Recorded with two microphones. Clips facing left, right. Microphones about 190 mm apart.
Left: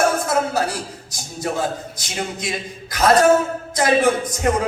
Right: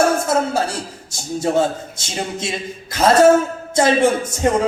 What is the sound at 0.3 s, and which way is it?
A man's voice, 25° right (ahead or behind).